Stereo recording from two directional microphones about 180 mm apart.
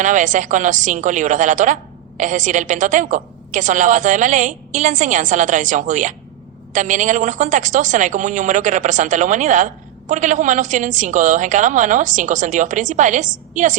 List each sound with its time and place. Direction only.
0.0 s a woman's voice: 45° right (ahead or behind)